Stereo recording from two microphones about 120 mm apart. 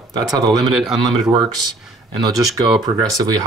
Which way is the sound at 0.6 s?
5° right (ahead or behind).